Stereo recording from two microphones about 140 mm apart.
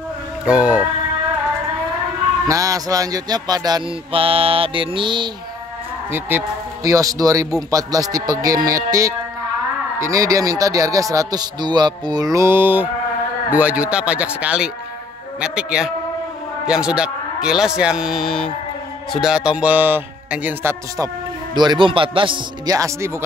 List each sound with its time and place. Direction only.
0.5 s speech: 5° right (ahead or behind)
2.4 s a man's voice: 25° right (ahead or behind)
4.1 s mantra: 40° right (ahead or behind)
6.1 s a man's voice: 15° right (ahead or behind)
21.5 s mantra: 35° right (ahead or behind)
22.7 s a man's voice: 20° right (ahead or behind)